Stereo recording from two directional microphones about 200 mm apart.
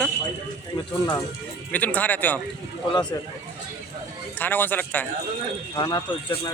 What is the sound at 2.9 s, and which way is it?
Speech, 20° left (ahead or behind).